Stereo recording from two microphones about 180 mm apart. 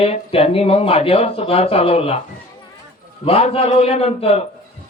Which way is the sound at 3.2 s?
30° left (ahead or behind).